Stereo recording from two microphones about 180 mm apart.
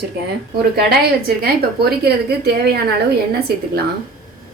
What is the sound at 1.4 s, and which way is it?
Speech, 60° right (ahead or behind).